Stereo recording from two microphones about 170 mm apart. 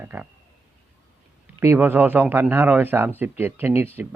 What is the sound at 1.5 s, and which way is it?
Speech, 15° right (ahead or behind).